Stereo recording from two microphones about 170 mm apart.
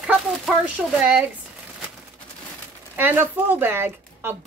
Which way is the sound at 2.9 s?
10° right (ahead or behind).